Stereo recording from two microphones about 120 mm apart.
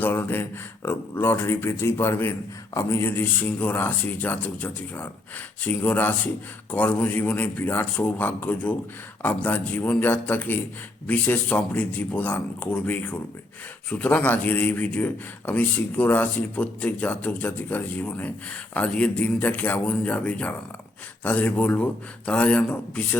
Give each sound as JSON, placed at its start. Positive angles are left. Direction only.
{"t": 0.0, "sound": "a man's voice", "side_deg": 15}